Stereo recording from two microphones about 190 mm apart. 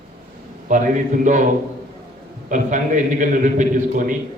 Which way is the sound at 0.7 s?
40° right (ahead or behind).